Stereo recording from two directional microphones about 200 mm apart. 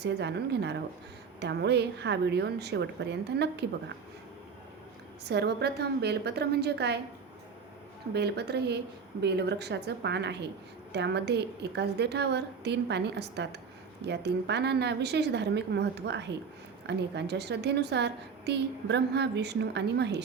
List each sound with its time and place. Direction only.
0.0 s a woman's voice: 55° right (ahead or behind)
5.2 s a woman's voice: 55° right (ahead or behind)
8.1 s a woman's voice: 55° right (ahead or behind)